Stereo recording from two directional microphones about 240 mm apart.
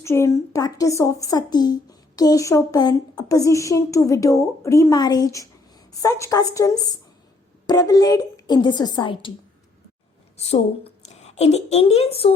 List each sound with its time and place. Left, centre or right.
0.0 s speech: centre
10.3 s a woman's voice: left